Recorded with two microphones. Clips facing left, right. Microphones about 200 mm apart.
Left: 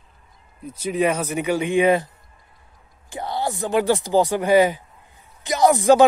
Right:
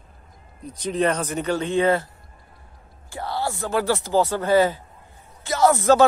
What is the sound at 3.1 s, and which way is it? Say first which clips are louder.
A man's voice: left 2 dB; 20° left (ahead or behind).